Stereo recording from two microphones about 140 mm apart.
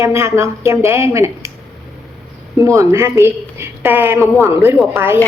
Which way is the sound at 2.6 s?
20° right (ahead or behind).